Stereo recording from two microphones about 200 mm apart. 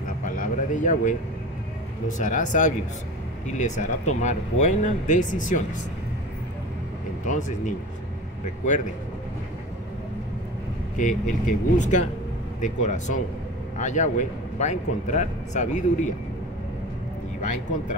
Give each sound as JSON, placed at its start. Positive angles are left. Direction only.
{"t": 0.2, "sound": "a sound", "side_deg": 40}
{"t": 2.1, "sound": "a man's voice", "side_deg": 40}
{"t": 7.2, "sound": "a man's voice", "side_deg": 40}
{"t": 11.0, "sound": "a man's voice", "side_deg": 40}